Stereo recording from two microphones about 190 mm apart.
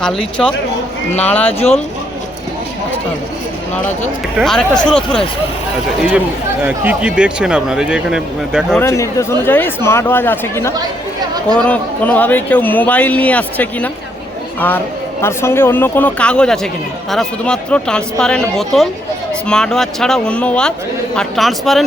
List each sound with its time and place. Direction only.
0.0 s a man's voice: 5° left (ahead or behind)
1.5 s speech: 35° left (ahead or behind)
4.4 s speech: centre (ahead or behind)
6.0 s speech: 10° right (ahead or behind)
8.7 s a man's voice: 15° left (ahead or behind)
15.2 s a man's voice: 15° left (ahead or behind)